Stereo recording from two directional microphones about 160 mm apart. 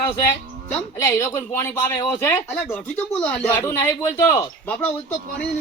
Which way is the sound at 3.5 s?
20° left (ahead or behind).